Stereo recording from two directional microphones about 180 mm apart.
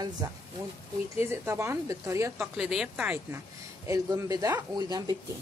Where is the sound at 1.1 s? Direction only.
15° right (ahead or behind).